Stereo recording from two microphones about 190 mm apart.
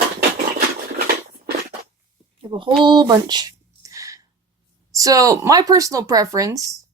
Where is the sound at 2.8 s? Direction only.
25° right (ahead or behind).